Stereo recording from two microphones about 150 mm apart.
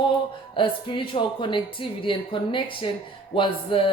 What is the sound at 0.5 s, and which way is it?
A woman's voice, 35° left (ahead or behind).